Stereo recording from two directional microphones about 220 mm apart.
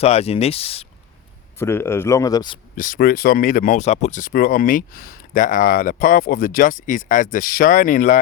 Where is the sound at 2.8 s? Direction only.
40° left (ahead or behind).